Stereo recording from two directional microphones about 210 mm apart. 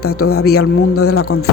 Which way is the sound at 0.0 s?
90° left.